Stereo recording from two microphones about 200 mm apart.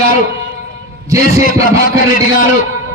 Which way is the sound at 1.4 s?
45° left (ahead or behind).